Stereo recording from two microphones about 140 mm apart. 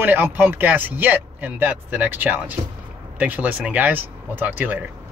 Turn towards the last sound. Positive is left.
turn(degrees=-10)  # may be behind; listen again after turning